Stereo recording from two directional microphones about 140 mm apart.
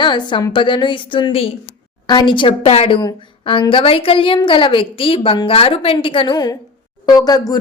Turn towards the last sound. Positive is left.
turn(degrees=25)  # may be behind; listen again after turning